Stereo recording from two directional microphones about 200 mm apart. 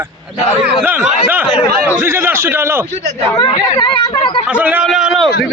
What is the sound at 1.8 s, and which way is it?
A man's voice, 10° right (ahead or behind).